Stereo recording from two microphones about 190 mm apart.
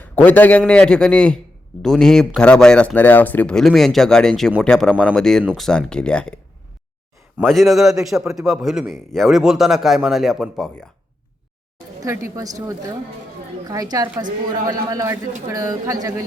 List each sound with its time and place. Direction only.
0.0 s speech: 10° left (ahead or behind)
7.4 s speech: centre (ahead or behind)
12.0 s a woman's voice: 15° right (ahead or behind)
13.9 s a woman's voice: 20° right (ahead or behind)